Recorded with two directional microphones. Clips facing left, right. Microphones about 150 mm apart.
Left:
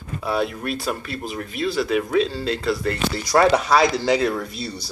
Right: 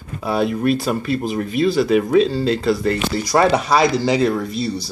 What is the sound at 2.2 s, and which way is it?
Speech, centre (ahead or behind).